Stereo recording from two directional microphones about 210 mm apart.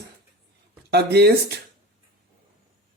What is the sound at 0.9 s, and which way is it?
Speech, 50° right (ahead or behind).